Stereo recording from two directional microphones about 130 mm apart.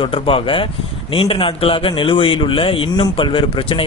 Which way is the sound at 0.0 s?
45° left (ahead or behind).